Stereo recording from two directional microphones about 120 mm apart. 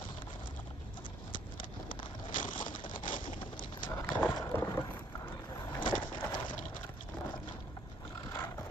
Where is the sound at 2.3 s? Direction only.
90° left.